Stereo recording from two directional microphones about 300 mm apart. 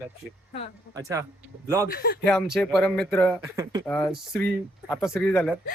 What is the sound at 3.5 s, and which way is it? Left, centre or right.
Speech, centre.